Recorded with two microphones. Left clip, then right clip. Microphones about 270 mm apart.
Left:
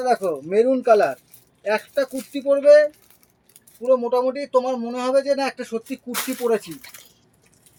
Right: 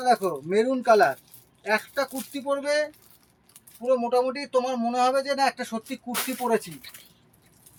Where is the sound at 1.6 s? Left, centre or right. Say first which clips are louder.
Left 4 dB; right.